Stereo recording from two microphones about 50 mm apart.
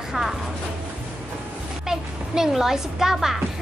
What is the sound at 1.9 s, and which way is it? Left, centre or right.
A child's voice, centre.